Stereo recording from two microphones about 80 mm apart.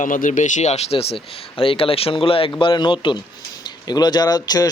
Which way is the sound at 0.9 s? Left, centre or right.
Left.